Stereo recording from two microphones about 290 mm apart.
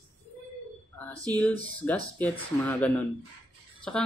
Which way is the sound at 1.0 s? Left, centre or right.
Centre.